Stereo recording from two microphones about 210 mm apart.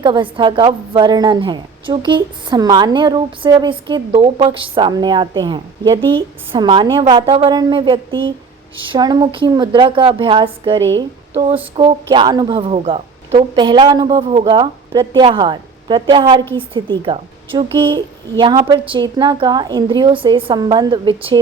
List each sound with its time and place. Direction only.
0.0 s a woman's voice: 25° right (ahead or behind)